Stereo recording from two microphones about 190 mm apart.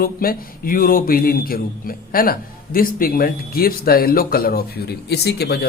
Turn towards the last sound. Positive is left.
turn(degrees=60)  # may be behind; listen again after turning